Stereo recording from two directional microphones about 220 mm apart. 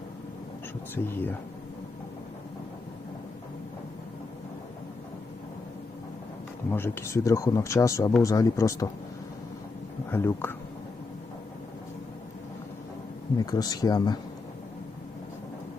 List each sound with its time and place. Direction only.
0.9 s speech: 10° left (ahead or behind)
6.7 s speech: 10° left (ahead or behind)
10.1 s speech: 10° left (ahead or behind)
13.4 s speech: 15° left (ahead or behind)